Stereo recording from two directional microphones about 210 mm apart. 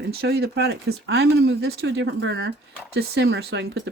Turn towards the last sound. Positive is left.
turn(degrees=-55)  # may be behind; listen again after turning